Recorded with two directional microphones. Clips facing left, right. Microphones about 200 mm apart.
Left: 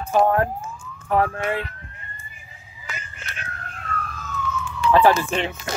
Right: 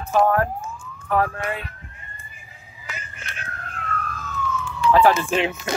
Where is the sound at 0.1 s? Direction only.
20° left (ahead or behind).